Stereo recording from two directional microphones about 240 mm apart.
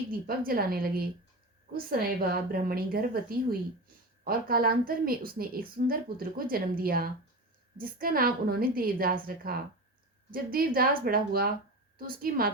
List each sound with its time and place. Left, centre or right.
0.1 s a woman's voice: right